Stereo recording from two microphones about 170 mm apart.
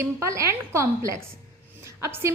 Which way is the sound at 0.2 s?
15° right (ahead or behind).